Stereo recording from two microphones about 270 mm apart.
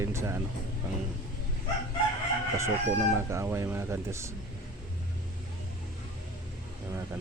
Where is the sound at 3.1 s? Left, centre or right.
Centre.